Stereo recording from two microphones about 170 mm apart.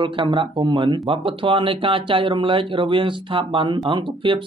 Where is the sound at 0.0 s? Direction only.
30° right (ahead or behind).